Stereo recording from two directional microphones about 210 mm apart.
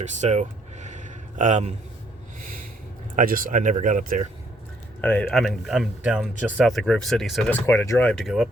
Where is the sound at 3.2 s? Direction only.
40° right (ahead or behind).